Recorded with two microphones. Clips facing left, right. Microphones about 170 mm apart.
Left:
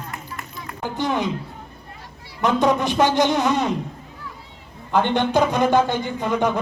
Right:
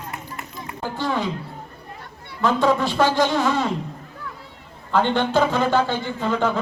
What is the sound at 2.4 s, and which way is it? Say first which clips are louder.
A man's voice: even; 20° left (ahead or behind).